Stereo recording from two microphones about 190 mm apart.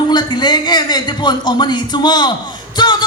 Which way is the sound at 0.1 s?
25° left (ahead or behind).